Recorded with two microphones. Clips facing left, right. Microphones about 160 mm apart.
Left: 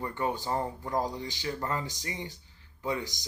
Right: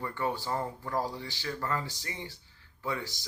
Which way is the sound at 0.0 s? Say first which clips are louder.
Left 1 dB; 20° left (ahead or behind).